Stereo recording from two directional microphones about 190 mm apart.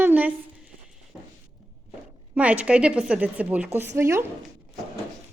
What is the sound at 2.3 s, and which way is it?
A woman's voice, 5° right (ahead or behind).